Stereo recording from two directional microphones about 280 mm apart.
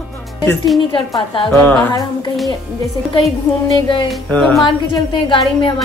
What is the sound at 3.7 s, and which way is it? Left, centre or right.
Speech, centre.